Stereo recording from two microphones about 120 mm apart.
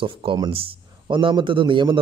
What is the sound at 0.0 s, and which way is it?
A man's voice, 45° right (ahead or behind).